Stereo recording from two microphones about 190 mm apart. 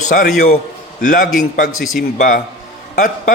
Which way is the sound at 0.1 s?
50° left (ahead or behind).